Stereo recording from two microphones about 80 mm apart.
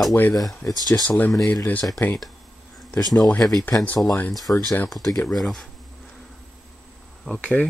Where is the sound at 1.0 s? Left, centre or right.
Left.